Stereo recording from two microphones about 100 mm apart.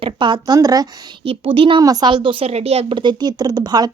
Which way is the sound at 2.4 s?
90° right.